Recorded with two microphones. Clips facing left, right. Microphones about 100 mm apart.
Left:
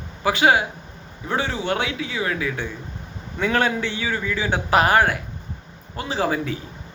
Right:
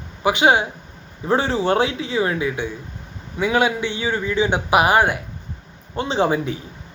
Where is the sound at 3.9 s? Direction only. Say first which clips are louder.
Right 4 dB; 25° right (ahead or behind).